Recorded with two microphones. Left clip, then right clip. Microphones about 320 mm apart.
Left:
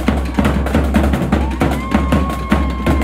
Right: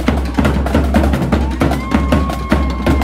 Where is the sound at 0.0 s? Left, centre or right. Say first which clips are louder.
Right 1 dB; centre.